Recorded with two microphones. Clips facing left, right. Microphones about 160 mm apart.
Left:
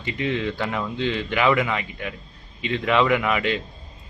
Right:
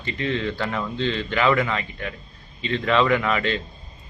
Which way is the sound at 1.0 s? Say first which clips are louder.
Even; 15° left (ahead or behind).